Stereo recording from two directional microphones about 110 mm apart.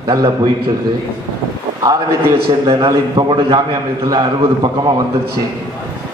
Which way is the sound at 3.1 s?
45° right (ahead or behind).